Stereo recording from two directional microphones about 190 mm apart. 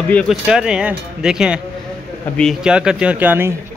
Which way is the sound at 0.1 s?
Centre (ahead or behind).